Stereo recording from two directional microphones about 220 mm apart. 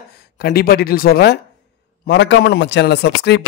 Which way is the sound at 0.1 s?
45° left (ahead or behind).